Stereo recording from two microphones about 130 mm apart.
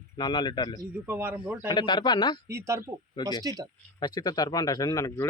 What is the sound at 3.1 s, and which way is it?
Speech, 35° left (ahead or behind).